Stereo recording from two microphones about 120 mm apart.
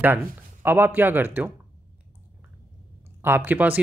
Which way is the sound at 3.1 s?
15° right (ahead or behind).